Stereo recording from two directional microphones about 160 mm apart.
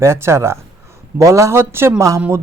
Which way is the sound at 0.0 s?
15° right (ahead or behind).